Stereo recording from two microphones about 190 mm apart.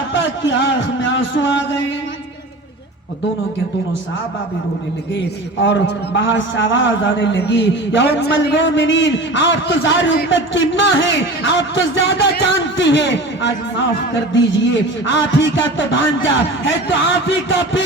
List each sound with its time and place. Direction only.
0.1 s a man's voice: 75° left (ahead or behind)
5.6 s a man's voice: 70° left (ahead or behind)